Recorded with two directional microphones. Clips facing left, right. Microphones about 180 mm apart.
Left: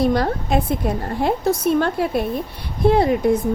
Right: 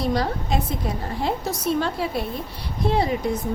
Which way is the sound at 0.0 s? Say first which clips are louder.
Left 5 dB; 55° left (ahead or behind).